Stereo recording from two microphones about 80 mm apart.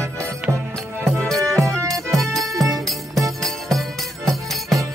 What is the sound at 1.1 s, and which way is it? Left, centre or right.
Music, centre.